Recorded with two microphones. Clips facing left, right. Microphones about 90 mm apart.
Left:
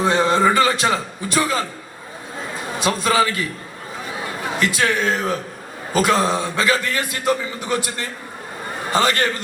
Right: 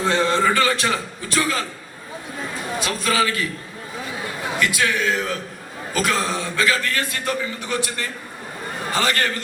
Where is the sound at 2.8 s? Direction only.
30° left (ahead or behind).